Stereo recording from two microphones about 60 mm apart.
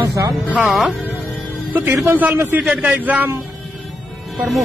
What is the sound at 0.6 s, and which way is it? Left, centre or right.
Speech, centre.